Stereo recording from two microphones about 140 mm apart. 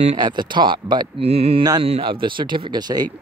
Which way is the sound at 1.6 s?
30° right (ahead or behind).